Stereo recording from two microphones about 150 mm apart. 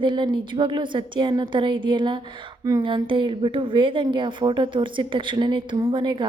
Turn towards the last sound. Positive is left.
turn(degrees=-30)  # may be behind; listen again after turning